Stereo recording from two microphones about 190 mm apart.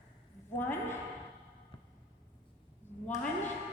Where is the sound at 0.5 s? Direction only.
10° left (ahead or behind).